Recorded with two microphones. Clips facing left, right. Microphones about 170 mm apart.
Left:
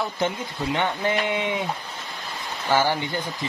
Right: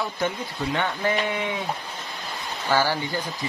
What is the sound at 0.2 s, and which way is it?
Speech, 25° left (ahead or behind).